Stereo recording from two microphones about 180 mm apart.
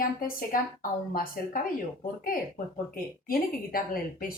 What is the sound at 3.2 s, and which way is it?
Speech, 55° left (ahead or behind).